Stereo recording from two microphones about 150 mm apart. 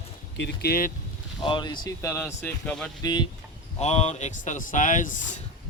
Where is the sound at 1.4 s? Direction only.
30° left (ahead or behind).